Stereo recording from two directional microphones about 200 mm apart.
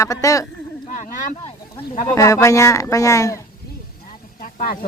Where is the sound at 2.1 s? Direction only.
15° left (ahead or behind).